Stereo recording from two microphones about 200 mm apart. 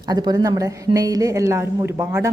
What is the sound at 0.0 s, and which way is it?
A woman's voice, 20° right (ahead or behind).